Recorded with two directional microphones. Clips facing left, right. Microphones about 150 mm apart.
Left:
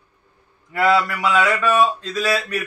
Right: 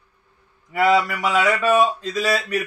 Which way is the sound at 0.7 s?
10° right (ahead or behind).